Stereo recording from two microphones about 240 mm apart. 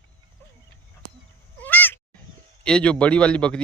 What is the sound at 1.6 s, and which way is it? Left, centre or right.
Cat, centre.